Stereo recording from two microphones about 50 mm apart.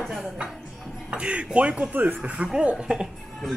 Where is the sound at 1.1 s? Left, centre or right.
Right.